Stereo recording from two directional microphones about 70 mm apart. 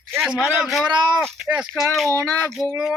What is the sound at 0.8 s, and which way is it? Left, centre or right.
Speech, right.